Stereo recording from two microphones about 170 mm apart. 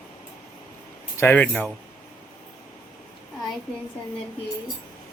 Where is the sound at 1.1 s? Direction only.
15° left (ahead or behind).